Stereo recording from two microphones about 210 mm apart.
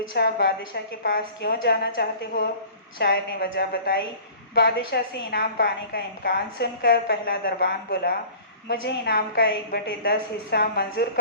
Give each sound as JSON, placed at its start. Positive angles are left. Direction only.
{"t": 0.1, "sound": "a woman's voice", "side_deg": 50}
{"t": 3.0, "sound": "a woman's voice", "side_deg": 50}